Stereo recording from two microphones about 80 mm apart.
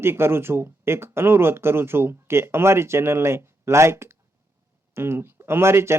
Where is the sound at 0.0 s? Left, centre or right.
Right.